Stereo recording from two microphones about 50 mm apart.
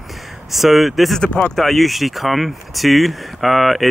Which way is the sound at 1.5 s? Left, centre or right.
Centre.